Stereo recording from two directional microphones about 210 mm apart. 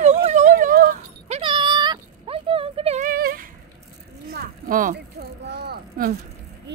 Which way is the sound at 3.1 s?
45° right (ahead or behind).